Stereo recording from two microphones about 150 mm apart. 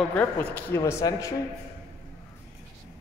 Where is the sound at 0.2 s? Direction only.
10° left (ahead or behind).